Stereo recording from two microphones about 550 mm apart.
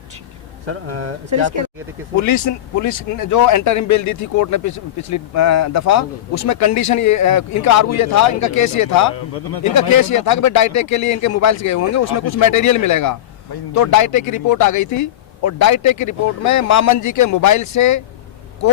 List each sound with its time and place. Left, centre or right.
0.7 s speech: right
2.2 s speech: left